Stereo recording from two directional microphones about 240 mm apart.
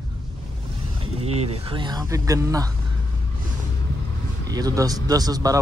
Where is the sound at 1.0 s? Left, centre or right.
Right.